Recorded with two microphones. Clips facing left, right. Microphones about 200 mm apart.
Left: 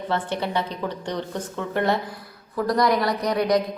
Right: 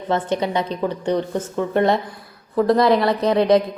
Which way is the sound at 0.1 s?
15° right (ahead or behind).